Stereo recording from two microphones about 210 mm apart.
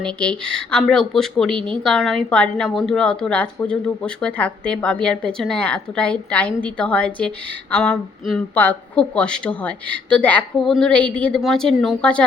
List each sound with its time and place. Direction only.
0.0 s a woman's voice: 5° left (ahead or behind)